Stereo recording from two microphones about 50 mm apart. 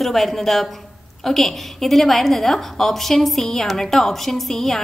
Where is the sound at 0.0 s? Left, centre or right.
Centre.